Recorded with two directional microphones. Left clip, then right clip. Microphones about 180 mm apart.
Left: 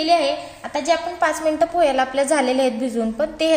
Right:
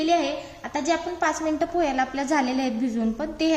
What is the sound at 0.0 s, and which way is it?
A woman's voice, 45° left (ahead or behind).